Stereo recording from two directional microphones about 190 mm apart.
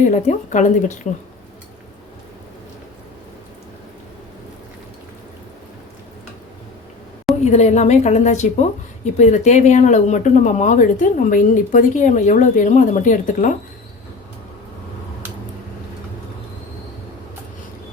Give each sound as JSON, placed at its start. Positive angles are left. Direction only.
{"t": 0.1, "sound": "speech", "side_deg": 40}
{"t": 7.4, "sound": "speech", "side_deg": 35}